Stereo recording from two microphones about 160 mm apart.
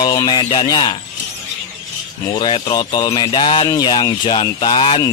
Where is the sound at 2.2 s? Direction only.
30° left (ahead or behind).